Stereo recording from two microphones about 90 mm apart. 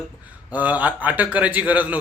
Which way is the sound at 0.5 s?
15° right (ahead or behind).